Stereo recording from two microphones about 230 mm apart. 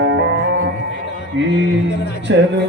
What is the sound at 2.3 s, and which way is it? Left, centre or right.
Speech, right.